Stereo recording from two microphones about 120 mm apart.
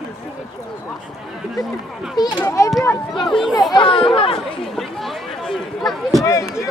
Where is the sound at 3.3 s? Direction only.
5° left (ahead or behind).